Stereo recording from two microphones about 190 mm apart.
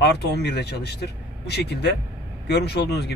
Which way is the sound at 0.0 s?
60° left (ahead or behind).